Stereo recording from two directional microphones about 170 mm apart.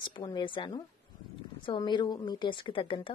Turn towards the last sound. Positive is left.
turn(degrees=30)  # may be behind; listen again after turning